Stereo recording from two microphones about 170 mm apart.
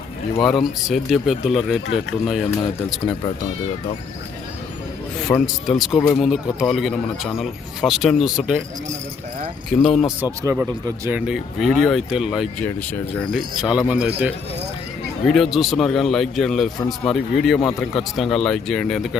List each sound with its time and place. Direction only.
0.3 s a man's voice: centre (ahead or behind)
5.3 s speech: 20° left (ahead or behind)
5.6 s a man's voice: centre (ahead or behind)
9.6 s a man's voice: 5° left (ahead or behind)
10.4 s speech: 15° right (ahead or behind)
11.3 s a man's voice: centre (ahead or behind)